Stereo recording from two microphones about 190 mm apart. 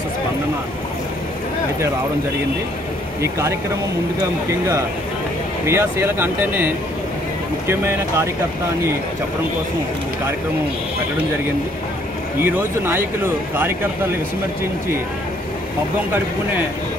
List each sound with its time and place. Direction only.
3.2 s speech: 15° right (ahead or behind)
12.4 s speech: 10° right (ahead or behind)